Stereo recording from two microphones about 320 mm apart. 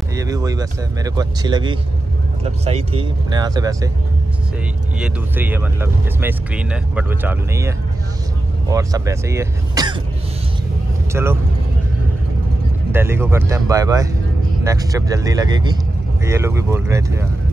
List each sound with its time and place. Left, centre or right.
0.1 s speech: centre
4.9 s speech: centre
11.2 s speech: centre
12.9 s speech: centre